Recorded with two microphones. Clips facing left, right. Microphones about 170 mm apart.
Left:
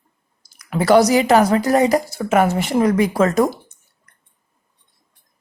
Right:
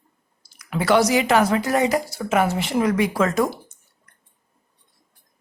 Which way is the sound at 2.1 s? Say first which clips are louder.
Left 4 dB; 50° left (ahead or behind).